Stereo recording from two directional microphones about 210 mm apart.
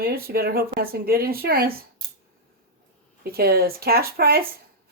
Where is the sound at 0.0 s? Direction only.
45° right (ahead or behind).